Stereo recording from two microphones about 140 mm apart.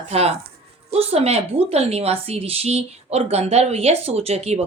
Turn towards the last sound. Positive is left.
turn(degrees=-50)  # may be behind; listen again after turning